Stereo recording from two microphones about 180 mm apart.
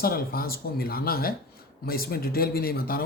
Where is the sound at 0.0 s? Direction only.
55° left (ahead or behind).